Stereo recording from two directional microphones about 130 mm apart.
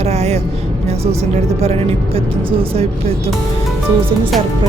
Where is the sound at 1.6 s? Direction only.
50° right (ahead or behind).